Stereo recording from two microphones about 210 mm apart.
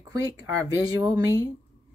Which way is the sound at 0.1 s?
15° right (ahead or behind).